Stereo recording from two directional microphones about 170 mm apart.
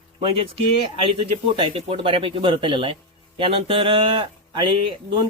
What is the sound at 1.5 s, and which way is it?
Speech, 35° right (ahead or behind).